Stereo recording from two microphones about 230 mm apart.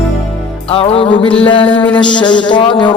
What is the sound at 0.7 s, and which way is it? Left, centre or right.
Music, left.